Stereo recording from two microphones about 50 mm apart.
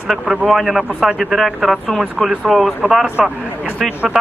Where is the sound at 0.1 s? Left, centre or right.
Centre.